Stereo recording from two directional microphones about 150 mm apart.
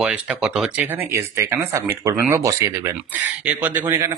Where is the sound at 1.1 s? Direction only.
20° right (ahead or behind).